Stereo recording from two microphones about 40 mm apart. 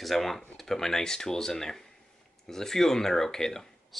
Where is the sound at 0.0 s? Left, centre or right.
Centre.